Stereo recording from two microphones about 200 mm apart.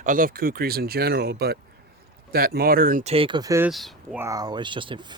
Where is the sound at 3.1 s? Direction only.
25° right (ahead or behind).